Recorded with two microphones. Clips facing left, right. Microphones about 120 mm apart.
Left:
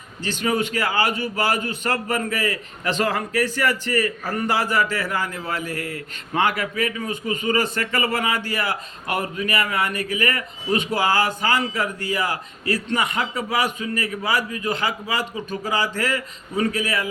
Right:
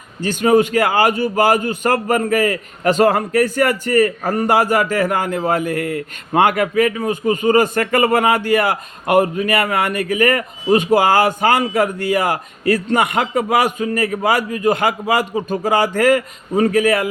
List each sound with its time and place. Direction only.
0.2 s a man's voice: 45° right (ahead or behind)